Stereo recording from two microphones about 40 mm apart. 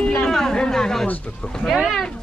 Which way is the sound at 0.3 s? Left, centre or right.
Centre.